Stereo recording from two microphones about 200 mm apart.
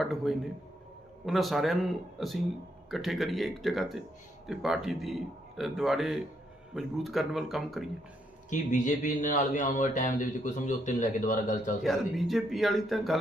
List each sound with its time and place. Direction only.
0.0 s a man's voice: centre (ahead or behind)
8.4 s a man's voice: 40° left (ahead or behind)
11.8 s speech: centre (ahead or behind)